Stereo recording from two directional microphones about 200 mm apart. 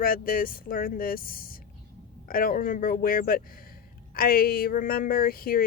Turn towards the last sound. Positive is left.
turn(degrees=45)  # may be behind; listen again after turning